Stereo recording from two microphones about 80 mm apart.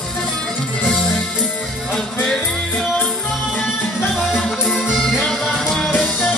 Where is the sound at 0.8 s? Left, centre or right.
Centre.